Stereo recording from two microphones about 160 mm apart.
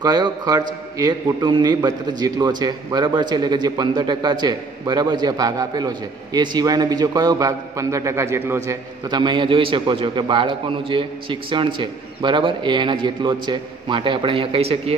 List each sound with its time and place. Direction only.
0.0 s a man's voice: 25° right (ahead or behind)
9.2 s a man's voice: 30° right (ahead or behind)